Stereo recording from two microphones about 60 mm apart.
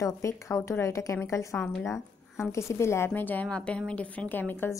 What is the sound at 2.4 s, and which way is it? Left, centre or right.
Speech, left.